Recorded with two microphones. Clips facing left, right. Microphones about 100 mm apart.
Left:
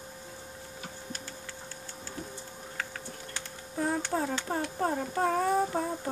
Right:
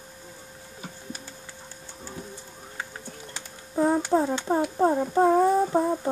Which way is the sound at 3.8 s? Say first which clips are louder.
Right 8 dB; 25° right (ahead or behind).